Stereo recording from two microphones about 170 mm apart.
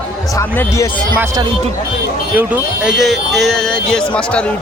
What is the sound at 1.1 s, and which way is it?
Speech, 15° right (ahead or behind).